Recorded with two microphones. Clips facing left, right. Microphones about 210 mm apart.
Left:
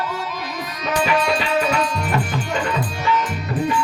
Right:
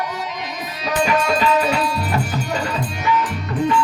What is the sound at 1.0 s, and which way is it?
Music, 40° right (ahead or behind).